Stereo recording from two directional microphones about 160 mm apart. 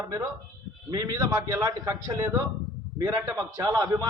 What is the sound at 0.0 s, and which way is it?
A man's voice, 20° right (ahead or behind).